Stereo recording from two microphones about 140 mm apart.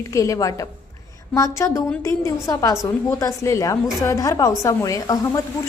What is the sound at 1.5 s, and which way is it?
A woman's voice, 20° left (ahead or behind).